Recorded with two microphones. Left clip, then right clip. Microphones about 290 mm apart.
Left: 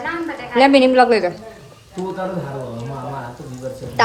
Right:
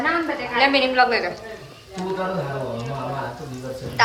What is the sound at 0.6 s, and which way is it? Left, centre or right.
A woman's voice, centre.